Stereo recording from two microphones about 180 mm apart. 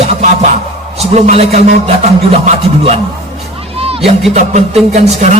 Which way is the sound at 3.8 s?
30° right (ahead or behind).